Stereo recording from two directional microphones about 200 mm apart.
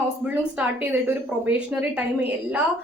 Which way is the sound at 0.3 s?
10° right (ahead or behind).